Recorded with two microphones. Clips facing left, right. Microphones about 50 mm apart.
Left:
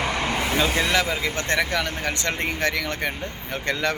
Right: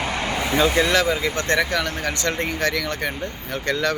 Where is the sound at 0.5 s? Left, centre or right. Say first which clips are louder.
Right 6 dB; centre.